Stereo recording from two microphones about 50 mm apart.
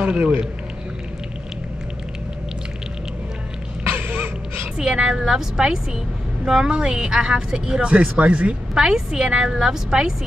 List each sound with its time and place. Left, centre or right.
0.2 s speech: right
3.9 s a sound: right
4.7 s a woman's voice: centre
8.7 s a woman's voice: centre